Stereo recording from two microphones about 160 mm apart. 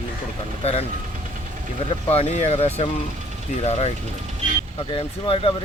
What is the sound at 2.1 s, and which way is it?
Speech, 40° left (ahead or behind).